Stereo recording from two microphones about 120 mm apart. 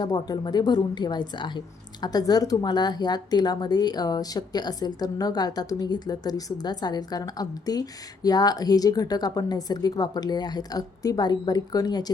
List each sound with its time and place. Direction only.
0.0 s a woman's voice: 35° left (ahead or behind)